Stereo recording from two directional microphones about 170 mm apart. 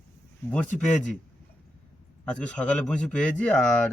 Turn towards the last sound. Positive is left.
turn(degrees=5)  # may be behind; listen again after turning